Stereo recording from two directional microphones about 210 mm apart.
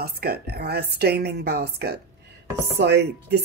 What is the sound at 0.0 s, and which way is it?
A woman's voice, 50° right (ahead or behind).